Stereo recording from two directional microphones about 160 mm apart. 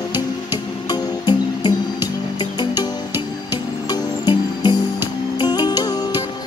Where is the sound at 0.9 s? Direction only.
30° left (ahead or behind).